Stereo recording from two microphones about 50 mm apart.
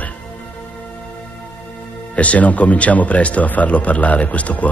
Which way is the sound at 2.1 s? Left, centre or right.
Left.